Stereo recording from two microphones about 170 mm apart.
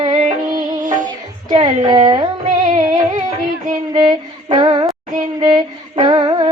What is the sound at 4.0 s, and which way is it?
Female singing, 25° right (ahead or behind).